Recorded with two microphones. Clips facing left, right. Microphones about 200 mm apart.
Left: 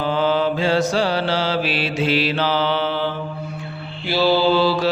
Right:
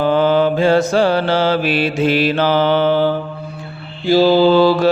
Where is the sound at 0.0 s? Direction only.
55° right (ahead or behind).